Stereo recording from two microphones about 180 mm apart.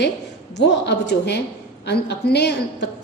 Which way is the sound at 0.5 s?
70° left (ahead or behind).